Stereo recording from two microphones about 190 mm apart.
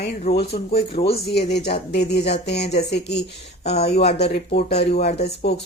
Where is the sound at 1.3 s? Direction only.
60° left (ahead or behind).